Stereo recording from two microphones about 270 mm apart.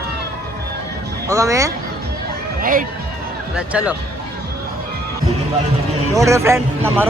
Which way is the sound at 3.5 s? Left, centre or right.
Centre.